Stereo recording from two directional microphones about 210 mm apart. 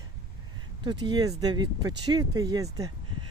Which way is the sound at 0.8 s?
20° right (ahead or behind).